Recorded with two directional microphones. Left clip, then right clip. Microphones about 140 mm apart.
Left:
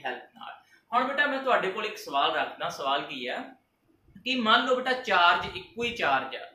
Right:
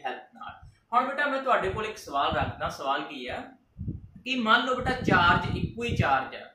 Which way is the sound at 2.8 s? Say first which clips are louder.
Left 2 dB; 10° left (ahead or behind).